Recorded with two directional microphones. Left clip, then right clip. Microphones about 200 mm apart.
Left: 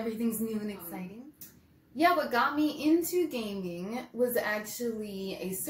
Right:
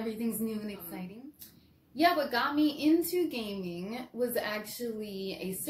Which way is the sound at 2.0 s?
10° right (ahead or behind).